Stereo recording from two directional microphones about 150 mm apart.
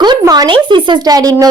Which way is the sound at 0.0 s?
25° right (ahead or behind).